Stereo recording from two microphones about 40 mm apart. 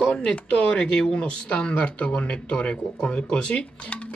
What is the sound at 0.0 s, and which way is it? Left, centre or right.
Speech, left.